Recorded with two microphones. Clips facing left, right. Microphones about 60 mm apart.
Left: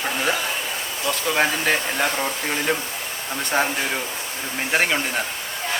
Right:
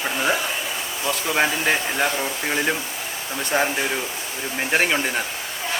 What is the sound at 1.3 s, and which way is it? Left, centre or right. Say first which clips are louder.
Speech: right 1 dB; centre.